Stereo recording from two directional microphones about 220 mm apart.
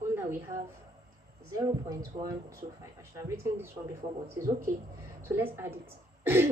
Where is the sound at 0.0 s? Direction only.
10° right (ahead or behind).